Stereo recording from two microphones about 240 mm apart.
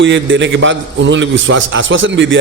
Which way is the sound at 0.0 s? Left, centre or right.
Right.